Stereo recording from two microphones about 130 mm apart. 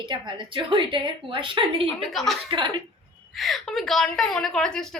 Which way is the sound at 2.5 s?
40° right (ahead or behind).